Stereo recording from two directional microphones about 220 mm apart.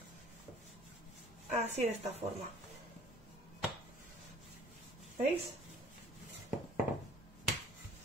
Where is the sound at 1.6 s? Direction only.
30° right (ahead or behind).